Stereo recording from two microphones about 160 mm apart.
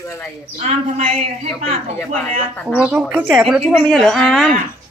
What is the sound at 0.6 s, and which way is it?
Speech, 45° right (ahead or behind).